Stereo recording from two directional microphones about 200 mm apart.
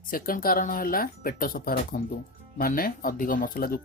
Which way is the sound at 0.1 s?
45° left (ahead or behind).